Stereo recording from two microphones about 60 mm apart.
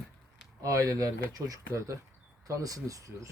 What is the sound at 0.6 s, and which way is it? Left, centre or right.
Speech, right.